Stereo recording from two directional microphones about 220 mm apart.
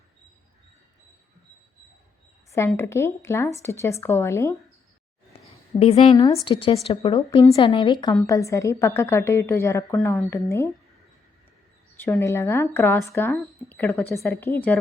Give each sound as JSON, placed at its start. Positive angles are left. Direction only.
{"t": 2.7, "sound": "a woman's voice", "side_deg": 10}
{"t": 5.8, "sound": "speech", "side_deg": 25}
{"t": 6.1, "sound": "a woman's voice", "side_deg": 15}
{"t": 12.0, "sound": "a woman's voice", "side_deg": 10}